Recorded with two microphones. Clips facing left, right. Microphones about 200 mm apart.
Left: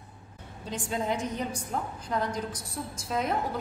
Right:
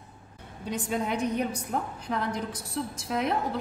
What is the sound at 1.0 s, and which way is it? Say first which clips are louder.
A woman's voice: right 3 dB; 65° right (ahead or behind).